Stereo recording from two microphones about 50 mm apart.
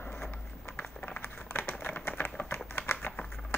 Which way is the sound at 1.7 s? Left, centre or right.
Left.